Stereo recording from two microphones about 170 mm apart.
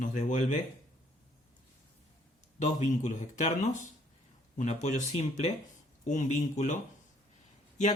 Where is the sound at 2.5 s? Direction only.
45° left (ahead or behind).